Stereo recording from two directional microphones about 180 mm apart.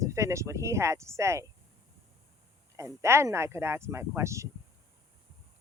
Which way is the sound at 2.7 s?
15° right (ahead or behind).